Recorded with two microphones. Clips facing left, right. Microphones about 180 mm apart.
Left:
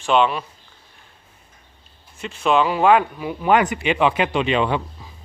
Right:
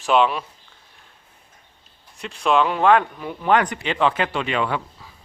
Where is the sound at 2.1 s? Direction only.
Centre (ahead or behind).